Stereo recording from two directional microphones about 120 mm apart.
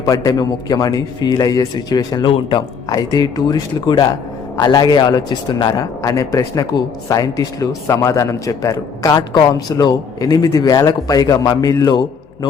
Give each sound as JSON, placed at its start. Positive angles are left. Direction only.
{"t": 0.0, "sound": "a man's voice", "side_deg": 30}